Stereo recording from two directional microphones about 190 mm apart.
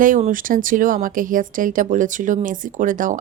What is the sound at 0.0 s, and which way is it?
Speech, 45° right (ahead or behind).